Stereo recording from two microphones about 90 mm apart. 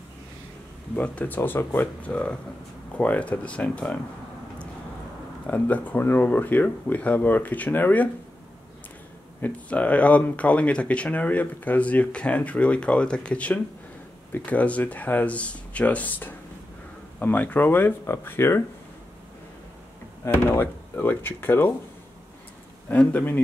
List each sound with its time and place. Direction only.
0.9 s speech: 15° left (ahead or behind)
5.5 s speech: 20° left (ahead or behind)
9.4 s speech: 15° left (ahead or behind)
20.4 s speech: 20° left (ahead or behind)
22.8 s speech: 15° left (ahead or behind)